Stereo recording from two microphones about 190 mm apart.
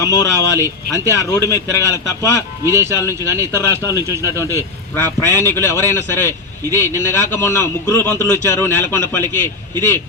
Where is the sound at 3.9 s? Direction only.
15° right (ahead or behind).